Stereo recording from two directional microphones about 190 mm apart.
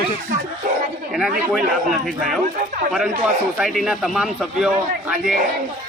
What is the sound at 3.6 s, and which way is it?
Speech, centre (ahead or behind).